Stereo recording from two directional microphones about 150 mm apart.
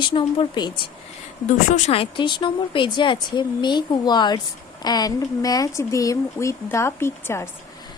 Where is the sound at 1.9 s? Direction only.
35° left (ahead or behind); by 7.4 s 15° left (ahead or behind).